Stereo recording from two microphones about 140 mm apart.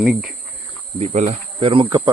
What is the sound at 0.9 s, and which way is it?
Speech, 55° right (ahead or behind).